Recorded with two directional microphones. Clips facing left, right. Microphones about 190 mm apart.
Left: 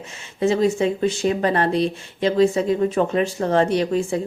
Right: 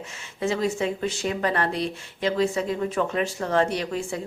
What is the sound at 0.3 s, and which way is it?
A woman's voice, 25° left (ahead or behind).